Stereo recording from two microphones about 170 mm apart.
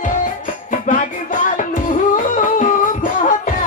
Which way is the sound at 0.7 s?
50° left (ahead or behind).